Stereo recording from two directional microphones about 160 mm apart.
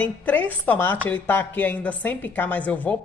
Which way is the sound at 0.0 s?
10° left (ahead or behind).